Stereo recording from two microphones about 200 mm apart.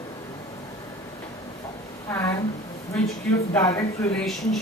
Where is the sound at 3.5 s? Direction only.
15° left (ahead or behind).